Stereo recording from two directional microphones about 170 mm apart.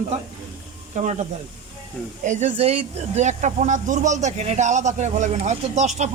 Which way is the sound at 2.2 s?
45° right (ahead or behind).